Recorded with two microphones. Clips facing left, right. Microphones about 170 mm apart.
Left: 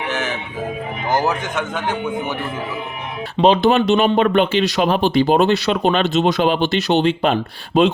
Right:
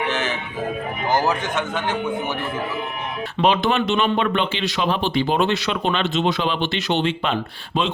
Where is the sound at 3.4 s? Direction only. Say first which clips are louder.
Left 5 dB; 35° left (ahead or behind).